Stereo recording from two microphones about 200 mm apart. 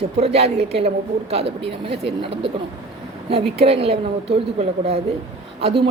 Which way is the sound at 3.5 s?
30° right (ahead or behind).